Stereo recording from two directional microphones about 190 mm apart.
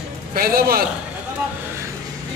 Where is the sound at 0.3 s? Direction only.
50° right (ahead or behind).